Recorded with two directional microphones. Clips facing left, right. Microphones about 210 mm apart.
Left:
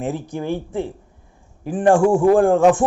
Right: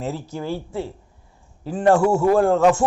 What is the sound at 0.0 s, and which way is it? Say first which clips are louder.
A man's voice: left 3 dB; 15° left (ahead or behind).